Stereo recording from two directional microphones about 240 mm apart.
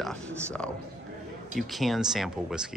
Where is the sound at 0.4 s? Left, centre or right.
Centre.